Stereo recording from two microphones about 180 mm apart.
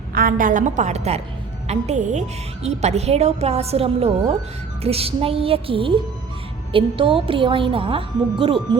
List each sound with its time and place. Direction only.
0.1 s a woman's voice: 50° right (ahead or behind); by 8.8 s 30° right (ahead or behind)